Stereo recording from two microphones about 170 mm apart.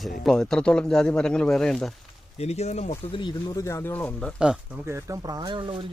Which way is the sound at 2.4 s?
40° left (ahead or behind).